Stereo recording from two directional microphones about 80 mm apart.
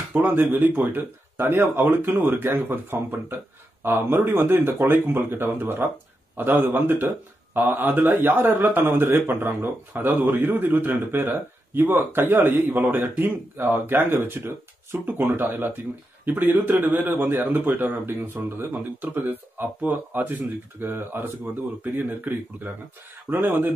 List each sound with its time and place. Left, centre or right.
0.1 s a man's voice: right